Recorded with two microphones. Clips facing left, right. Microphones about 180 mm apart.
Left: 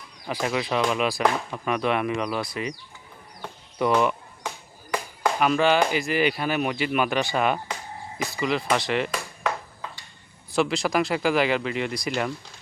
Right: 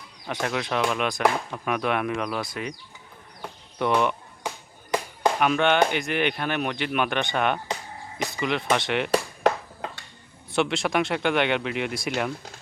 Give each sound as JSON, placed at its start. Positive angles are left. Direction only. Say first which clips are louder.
{"t": 0.3, "sound": "speech", "louder": "left 2 dB", "side_deg": 0}
{"t": 4.4, "sound": "music", "louder": "right 1 dB", "side_deg": -20}
{"t": 5.4, "sound": "speech", "louder": "left 1 dB", "side_deg": 0}
{"t": 10.5, "sound": "speech", "louder": "left 1 dB", "side_deg": 0}